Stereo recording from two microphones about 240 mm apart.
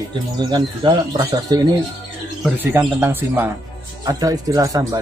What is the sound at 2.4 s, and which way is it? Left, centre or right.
Speech, centre.